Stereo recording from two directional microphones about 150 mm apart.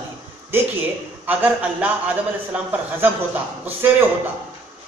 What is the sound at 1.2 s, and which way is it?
A man's voice, 10° right (ahead or behind).